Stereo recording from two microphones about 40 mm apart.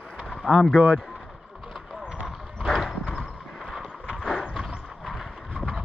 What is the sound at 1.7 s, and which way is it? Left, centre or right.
Clip-clop, right.